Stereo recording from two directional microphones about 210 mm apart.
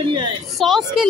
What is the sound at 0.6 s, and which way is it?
Speech, centre (ahead or behind).